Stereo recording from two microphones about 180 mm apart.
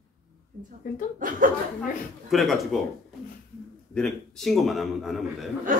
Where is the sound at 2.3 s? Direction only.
Centre (ahead or behind).